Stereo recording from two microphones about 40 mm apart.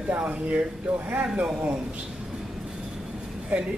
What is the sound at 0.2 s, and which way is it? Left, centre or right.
A man's voice, right.